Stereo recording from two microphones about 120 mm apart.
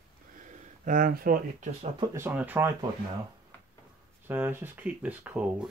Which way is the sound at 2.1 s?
15° right (ahead or behind).